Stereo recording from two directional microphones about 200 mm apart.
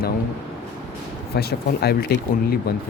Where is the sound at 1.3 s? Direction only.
55° left (ahead or behind).